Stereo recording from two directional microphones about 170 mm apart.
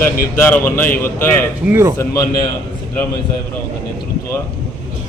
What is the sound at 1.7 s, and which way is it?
Speech, 15° right (ahead or behind).